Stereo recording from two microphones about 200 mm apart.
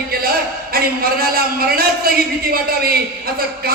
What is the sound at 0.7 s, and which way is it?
A man's voice, 50° right (ahead or behind).